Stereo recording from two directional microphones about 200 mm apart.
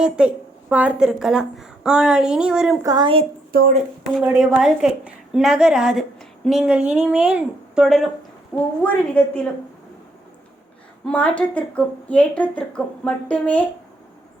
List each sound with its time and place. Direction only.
0.0 s a woman's voice: 5° right (ahead or behind)
2.8 s a woman's voice: 20° right (ahead or behind)
3.5 s speech: 50° right (ahead or behind)
4.2 s a woman's voice: 5° right (ahead or behind)
8.8 s a woman's voice: 10° left (ahead or behind)
11.0 s a woman's voice: 5° left (ahead or behind)